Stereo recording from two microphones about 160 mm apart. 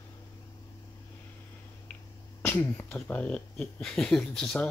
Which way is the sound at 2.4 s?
15° left (ahead or behind).